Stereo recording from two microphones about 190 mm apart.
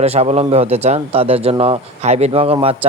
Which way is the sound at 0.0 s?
35° right (ahead or behind).